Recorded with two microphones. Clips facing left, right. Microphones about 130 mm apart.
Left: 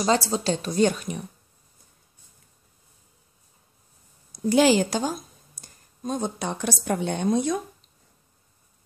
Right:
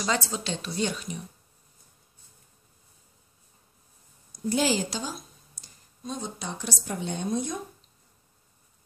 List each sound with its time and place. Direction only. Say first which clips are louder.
0.0 s speech: left 7 dB; 35° left (ahead or behind); by 1.2 s 55° left (ahead or behind)
4.3 s speech: left 7 dB; 85° left